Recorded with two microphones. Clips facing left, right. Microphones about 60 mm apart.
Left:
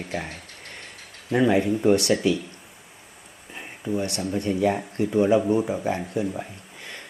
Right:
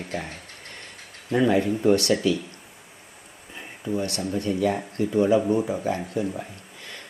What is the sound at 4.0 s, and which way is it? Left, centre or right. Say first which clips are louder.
Speech: even; left.